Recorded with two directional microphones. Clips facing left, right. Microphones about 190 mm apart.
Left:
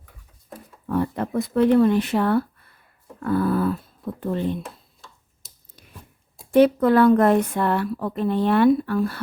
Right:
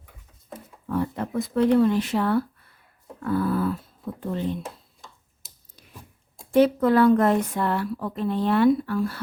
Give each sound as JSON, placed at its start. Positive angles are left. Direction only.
{"t": 0.9, "sound": "a woman's voice", "side_deg": 60}
{"t": 6.5, "sound": "a woman's voice", "side_deg": 60}